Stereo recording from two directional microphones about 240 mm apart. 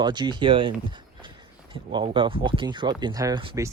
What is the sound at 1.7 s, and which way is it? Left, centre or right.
Speech, centre.